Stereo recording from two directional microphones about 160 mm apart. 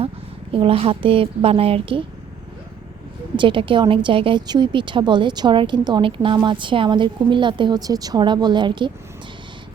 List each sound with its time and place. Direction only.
0.5 s a woman's voice: 35° right (ahead or behind)
3.3 s a woman's voice: 30° right (ahead or behind)